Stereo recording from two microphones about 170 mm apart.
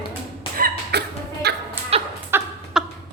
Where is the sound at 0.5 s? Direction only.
65° right (ahead or behind).